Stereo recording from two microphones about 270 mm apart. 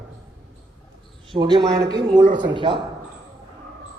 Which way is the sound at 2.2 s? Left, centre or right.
Right.